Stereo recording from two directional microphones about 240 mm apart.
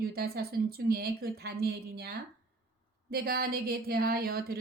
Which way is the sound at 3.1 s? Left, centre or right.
Right.